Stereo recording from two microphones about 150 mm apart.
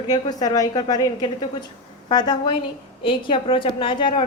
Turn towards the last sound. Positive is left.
turn(degrees=35)  # may be behind; listen again after turning